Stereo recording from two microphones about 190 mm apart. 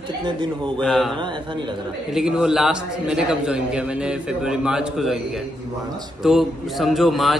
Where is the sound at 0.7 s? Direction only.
Centre (ahead or behind).